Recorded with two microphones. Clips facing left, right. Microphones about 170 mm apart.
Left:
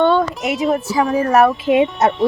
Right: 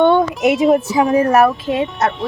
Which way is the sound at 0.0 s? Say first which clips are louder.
Right 3 dB; 15° right (ahead or behind).